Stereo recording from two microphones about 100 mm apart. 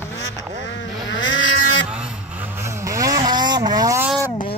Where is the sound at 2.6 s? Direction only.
30° right (ahead or behind).